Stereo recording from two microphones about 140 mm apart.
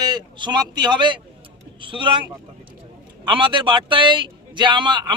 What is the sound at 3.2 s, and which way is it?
Speech, 35° right (ahead or behind).